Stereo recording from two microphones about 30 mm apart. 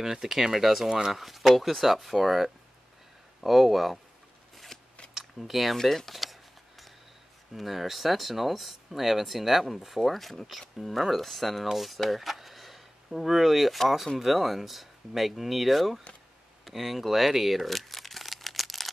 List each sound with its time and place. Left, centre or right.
0.0 s speech: centre
0.8 s speech: centre
1.1 s speech: centre
4.7 s scissors: centre
5.4 s speech: centre
5.8 s speech: centre
7.5 s speech: centre
12.0 s a sound: centre
13.8 s speech: centre
17.3 s crumpling: centre